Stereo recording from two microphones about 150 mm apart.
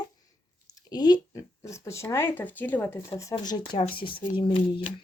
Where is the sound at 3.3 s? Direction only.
30° left (ahead or behind).